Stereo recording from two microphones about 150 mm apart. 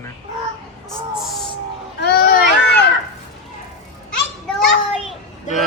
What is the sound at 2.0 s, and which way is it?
Children playing, 90° left.